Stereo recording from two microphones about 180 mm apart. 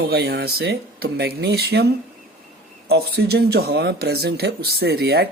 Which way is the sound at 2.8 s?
60° right (ahead or behind).